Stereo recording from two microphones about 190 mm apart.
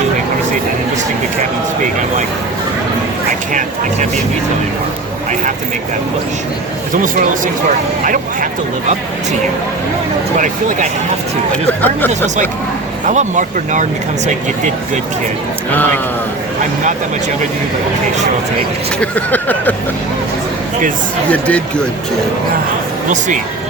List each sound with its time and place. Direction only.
6.9 s speech: 45° right (ahead or behind)
10.3 s speech: 40° right (ahead or behind)
11.5 s speech: 10° left (ahead or behind)
13.1 s speech: 40° right (ahead or behind)
18.9 s speech: 10° left (ahead or behind)
21.2 s speech: 5° left (ahead or behind)